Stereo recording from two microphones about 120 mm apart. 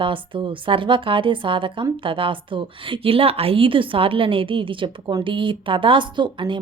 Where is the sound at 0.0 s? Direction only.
45° right (ahead or behind).